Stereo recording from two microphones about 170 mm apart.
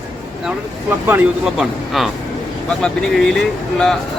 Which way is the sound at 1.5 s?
Centre (ahead or behind).